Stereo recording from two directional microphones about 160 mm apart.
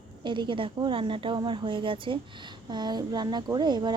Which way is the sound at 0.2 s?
30° right (ahead or behind).